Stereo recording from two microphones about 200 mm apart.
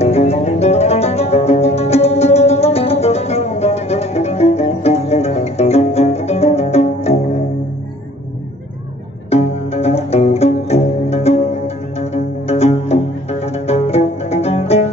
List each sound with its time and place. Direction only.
0.0 s music: 30° left (ahead or behind)
9.3 s music: 30° left (ahead or behind)